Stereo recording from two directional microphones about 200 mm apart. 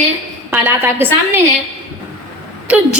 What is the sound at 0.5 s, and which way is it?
Speech, 10° right (ahead or behind).